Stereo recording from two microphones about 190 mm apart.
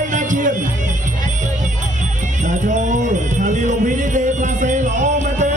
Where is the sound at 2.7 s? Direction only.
40° right (ahead or behind).